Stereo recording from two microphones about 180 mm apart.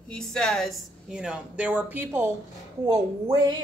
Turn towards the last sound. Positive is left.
turn(degrees=-20)  # may be behind; listen again after turning